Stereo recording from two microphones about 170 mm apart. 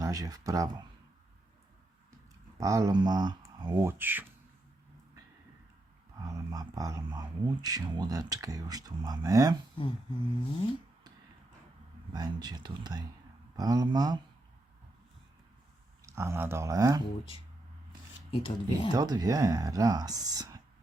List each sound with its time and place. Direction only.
0.0 s speech: 20° right (ahead or behind)
2.6 s speech: 20° right (ahead or behind)
3.8 s speech: 10° right (ahead or behind)
6.1 s speech: 20° right (ahead or behind)
9.8 s a sound: 30° left (ahead or behind)
12.1 s speech: 25° right (ahead or behind)
16.0 s speech: 15° right (ahead or behind)
18.3 s speech: 30° left (ahead or behind)
18.9 s speech: 20° right (ahead or behind)